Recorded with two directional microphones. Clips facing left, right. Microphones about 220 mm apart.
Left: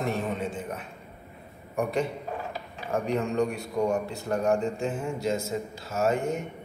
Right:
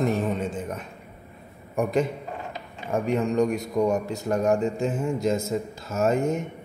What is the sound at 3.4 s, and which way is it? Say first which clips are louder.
A man's voice: right 4 dB; 40° right (ahead or behind).